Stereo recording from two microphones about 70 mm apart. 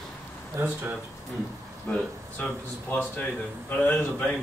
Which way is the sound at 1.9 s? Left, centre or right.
Left.